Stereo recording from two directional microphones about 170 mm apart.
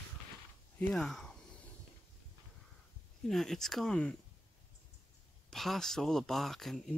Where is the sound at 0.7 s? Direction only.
Centre (ahead or behind).